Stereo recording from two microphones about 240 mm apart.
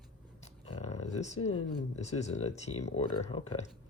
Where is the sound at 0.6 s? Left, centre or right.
Left.